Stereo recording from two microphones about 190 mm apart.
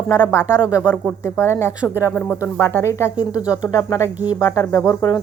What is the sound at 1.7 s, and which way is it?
Speech, 10° right (ahead or behind).